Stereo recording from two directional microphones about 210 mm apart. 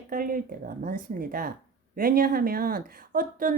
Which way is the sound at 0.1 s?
40° right (ahead or behind).